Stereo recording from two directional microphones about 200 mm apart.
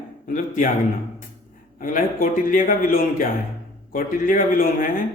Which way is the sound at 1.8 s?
40° left (ahead or behind).